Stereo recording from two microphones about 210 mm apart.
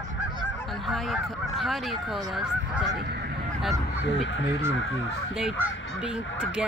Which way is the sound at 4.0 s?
60° left (ahead or behind).